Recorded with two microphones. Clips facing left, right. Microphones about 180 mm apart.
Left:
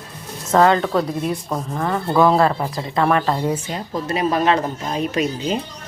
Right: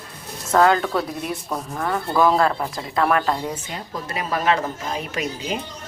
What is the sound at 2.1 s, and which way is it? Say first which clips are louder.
Speech: left 3 dB; 25° left (ahead or behind).